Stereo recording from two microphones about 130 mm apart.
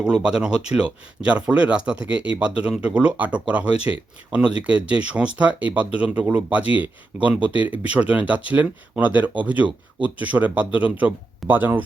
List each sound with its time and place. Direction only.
0.0 s speech: 5° right (ahead or behind)